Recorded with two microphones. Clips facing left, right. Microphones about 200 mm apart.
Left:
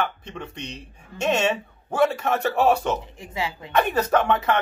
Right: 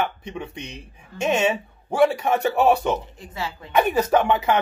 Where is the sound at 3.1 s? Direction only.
15° left (ahead or behind).